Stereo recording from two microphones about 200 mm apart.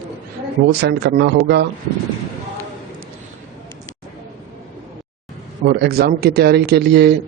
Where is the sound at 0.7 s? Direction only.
55° right (ahead or behind).